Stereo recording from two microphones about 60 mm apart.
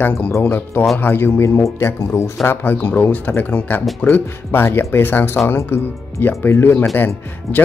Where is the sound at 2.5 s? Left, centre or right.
Left.